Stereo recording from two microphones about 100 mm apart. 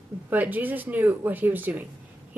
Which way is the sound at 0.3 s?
15° right (ahead or behind).